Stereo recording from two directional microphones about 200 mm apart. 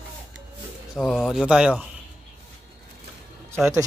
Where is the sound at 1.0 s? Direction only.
Centre (ahead or behind).